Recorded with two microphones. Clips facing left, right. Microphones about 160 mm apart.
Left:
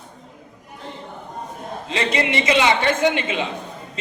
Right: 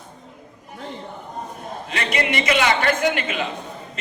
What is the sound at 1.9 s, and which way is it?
A man's voice, 25° left (ahead or behind).